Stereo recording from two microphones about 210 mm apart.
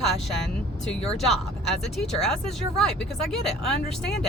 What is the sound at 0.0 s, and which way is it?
Vehicle, centre (ahead or behind).